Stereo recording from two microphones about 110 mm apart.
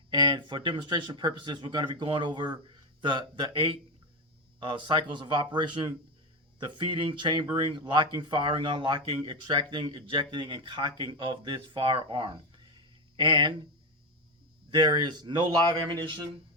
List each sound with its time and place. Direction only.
0.1 s speech: 45° right (ahead or behind)
14.7 s speech: 40° right (ahead or behind)